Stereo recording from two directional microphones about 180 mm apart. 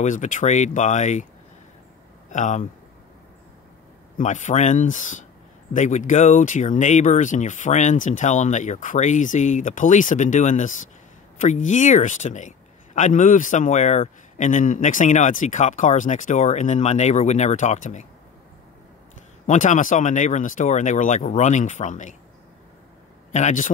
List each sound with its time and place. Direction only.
0.0 s speech: 45° left (ahead or behind)
2.3 s speech: 40° left (ahead or behind)
4.2 s speech: 45° left (ahead or behind)
19.4 s speech: 45° left (ahead or behind)
23.3 s speech: 45° left (ahead or behind)